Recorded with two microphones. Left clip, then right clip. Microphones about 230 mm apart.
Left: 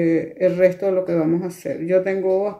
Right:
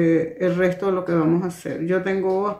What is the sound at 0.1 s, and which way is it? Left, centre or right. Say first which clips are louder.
Speech: left 1 dB; right.